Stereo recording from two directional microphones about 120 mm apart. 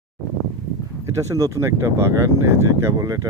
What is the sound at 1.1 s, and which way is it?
Speech, 25° right (ahead or behind).